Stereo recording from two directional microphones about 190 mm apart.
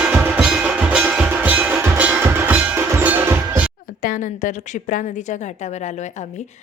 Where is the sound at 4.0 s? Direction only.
45° left (ahead or behind).